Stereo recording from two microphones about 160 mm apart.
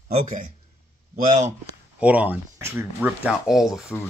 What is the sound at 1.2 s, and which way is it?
Speech, 50° right (ahead or behind).